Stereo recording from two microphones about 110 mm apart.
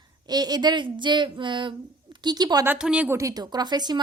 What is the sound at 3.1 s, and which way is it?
Speech, 30° right (ahead or behind).